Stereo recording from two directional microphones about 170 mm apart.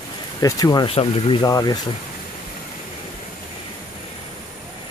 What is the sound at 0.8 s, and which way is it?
Speech, 35° left (ahead or behind).